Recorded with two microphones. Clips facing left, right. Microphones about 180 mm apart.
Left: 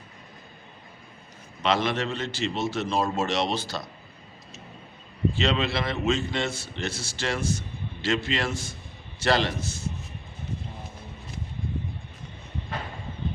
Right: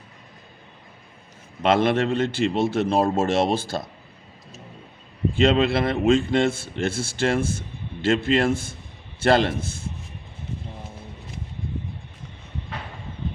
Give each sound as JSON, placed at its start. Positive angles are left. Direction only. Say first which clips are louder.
{"t": 1.6, "sound": "a man's voice", "louder": "right 6 dB", "side_deg": -55}
{"t": 5.3, "sound": "a man's voice", "louder": "right 9 dB", "side_deg": -50}